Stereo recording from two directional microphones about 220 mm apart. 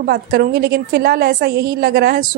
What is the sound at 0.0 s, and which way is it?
A woman's voice, 45° right (ahead or behind).